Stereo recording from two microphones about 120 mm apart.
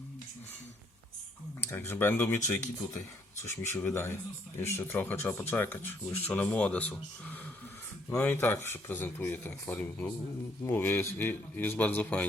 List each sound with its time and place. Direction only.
1.9 s speech: 15° left (ahead or behind)
2.4 s speech: 25° left (ahead or behind)